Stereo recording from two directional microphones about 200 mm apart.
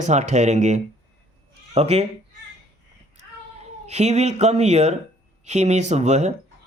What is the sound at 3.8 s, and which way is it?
Speech, 35° right (ahead or behind).